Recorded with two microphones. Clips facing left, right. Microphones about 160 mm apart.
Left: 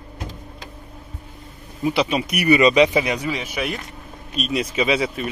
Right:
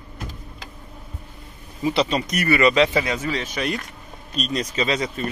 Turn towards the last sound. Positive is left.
turn(degrees=5)  # may be behind; listen again after turning